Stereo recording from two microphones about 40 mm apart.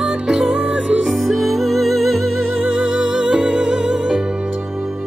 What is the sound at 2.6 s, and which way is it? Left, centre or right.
Music, centre.